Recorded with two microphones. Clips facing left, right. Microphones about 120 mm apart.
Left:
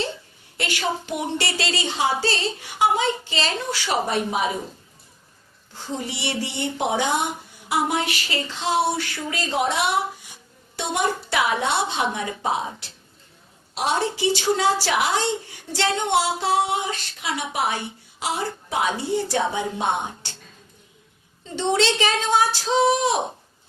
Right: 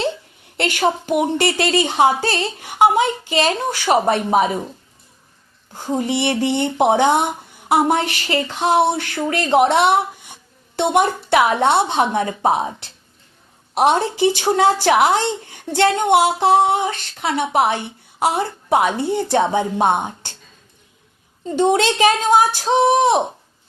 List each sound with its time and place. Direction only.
0.5 s a woman's voice: 55° right (ahead or behind)
5.7 s speech: 50° right (ahead or behind)
13.7 s speech: 55° right (ahead or behind)
21.4 s a woman's voice: 50° right (ahead or behind)